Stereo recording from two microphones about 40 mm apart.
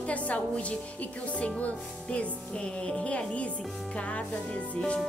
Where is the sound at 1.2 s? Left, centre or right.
Left.